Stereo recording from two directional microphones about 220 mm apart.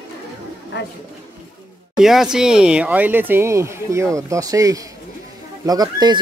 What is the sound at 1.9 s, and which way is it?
Speech, centre (ahead or behind).